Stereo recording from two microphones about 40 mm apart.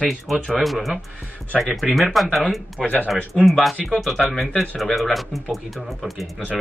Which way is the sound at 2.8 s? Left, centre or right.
Centre.